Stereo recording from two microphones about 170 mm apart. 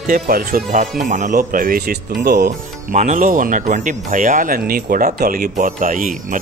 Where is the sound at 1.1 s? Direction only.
50° right (ahead or behind).